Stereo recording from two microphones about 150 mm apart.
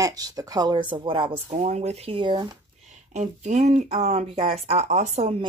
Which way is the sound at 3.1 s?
55° right (ahead or behind).